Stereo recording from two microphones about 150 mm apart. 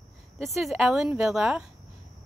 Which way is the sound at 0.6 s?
Centre (ahead or behind).